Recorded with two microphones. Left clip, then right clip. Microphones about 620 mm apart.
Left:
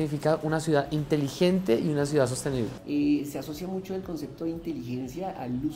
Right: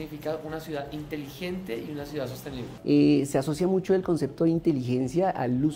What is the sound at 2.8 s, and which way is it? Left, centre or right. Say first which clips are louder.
Speech: right 7 dB; right.